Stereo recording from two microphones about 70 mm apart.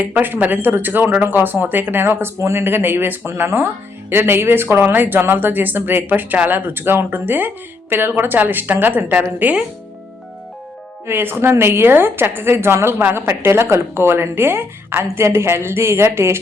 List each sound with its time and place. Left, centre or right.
0.0 s speech: right
11.0 s a woman's voice: right